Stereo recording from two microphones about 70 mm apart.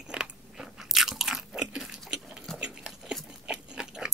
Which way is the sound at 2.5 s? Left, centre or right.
Centre.